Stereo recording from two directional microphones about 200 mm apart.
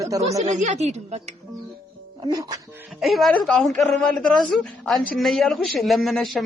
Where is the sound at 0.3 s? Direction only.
35° right (ahead or behind).